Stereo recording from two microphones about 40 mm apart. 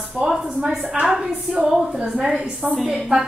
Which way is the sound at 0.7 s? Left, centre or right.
Centre.